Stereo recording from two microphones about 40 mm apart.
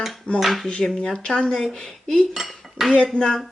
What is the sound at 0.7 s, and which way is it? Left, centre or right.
Speech, left.